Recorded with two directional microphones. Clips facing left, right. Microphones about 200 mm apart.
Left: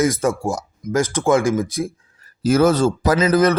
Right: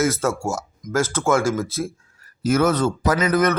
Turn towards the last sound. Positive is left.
turn(degrees=35)  # may be behind; listen again after turning